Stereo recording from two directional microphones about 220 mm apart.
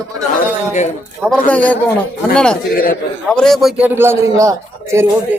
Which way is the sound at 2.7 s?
40° left (ahead or behind).